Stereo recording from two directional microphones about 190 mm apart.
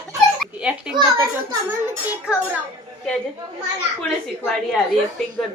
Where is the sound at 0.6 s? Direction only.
5° right (ahead or behind).